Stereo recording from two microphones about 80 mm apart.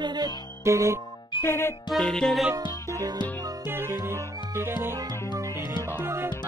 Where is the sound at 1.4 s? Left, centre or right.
Left.